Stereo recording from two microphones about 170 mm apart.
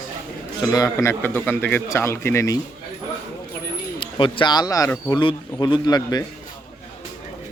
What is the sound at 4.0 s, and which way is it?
A man's voice, 30° left (ahead or behind).